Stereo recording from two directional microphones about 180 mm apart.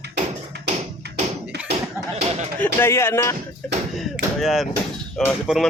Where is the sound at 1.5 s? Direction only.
65° right (ahead or behind).